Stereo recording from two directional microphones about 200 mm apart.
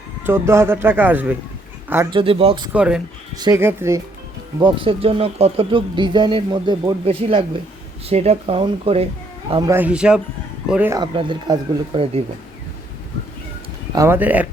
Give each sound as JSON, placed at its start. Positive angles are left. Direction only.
{"t": 0.3, "sound": "speech", "side_deg": -15}
{"t": 2.0, "sound": "speech", "side_deg": -25}
{"t": 2.7, "sound": "speech", "side_deg": -5}
{"t": 3.3, "sound": "speech", "side_deg": -20}
{"t": 4.6, "sound": "speech", "side_deg": -25}
{"t": 9.5, "sound": "speech", "side_deg": -20}
{"t": 10.9, "sound": "speech", "side_deg": -25}
{"t": 13.9, "sound": "speech", "side_deg": -15}